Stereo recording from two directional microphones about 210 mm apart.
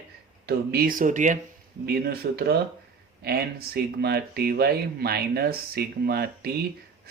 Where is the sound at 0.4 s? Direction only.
45° right (ahead or behind).